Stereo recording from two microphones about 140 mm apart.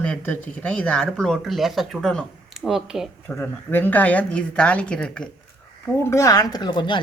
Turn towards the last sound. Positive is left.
turn(degrees=35)  # may be behind; listen again after turning